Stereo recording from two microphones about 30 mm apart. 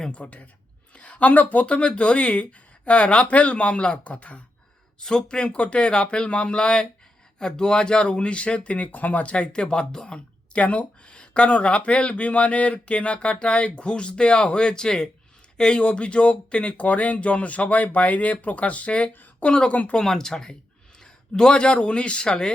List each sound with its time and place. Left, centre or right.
0.1 s speech: left
1.6 s speech: left
4.0 s speech: left
4.9 s speech: left
5.4 s speech: left
8.9 s speech: left
9.2 s speech: left
10.5 s speech: left
11.0 s speech: left
19.0 s speech: left
20.0 s a man's voice: centre